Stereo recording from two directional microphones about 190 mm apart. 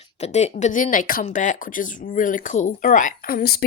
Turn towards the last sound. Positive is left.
turn(degrees=50)  # may be behind; listen again after turning